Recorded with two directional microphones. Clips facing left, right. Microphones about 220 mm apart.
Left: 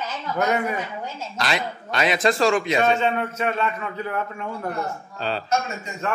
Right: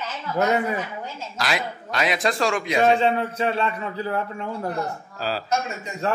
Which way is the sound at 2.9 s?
30° right (ahead or behind).